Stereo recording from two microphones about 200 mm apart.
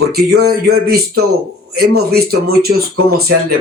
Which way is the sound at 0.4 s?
50° right (ahead or behind).